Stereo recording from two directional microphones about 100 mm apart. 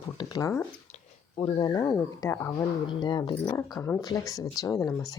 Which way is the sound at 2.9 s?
50° left (ahead or behind).